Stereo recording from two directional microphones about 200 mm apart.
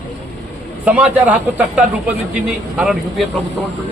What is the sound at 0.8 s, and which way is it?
A man's voice, 5° right (ahead or behind).